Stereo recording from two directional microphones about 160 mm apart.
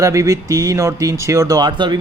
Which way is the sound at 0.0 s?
20° right (ahead or behind).